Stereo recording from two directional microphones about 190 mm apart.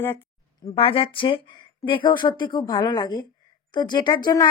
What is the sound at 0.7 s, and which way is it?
Speech, 30° left (ahead or behind).